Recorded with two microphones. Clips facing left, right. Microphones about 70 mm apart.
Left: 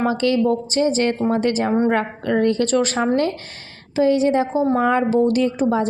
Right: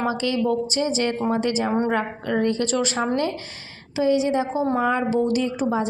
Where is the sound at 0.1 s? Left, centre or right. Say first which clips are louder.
Left 4 dB; left.